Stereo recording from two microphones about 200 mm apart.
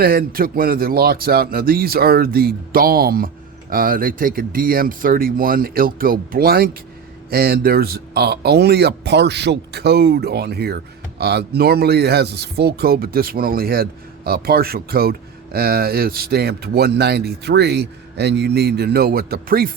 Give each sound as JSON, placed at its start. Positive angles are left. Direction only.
{"t": 0.0, "sound": "speech", "side_deg": -50}